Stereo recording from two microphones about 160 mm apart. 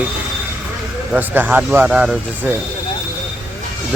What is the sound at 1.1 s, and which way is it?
Speech, 10° right (ahead or behind).